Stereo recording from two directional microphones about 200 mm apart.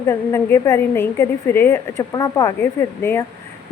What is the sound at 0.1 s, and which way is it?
A woman's voice, 15° left (ahead or behind).